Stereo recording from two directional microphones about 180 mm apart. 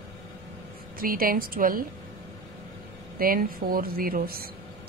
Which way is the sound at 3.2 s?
55° right (ahead or behind).